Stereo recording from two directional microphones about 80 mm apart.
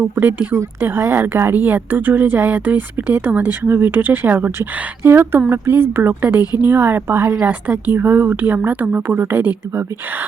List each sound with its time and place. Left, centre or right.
0.0 s a woman's voice: right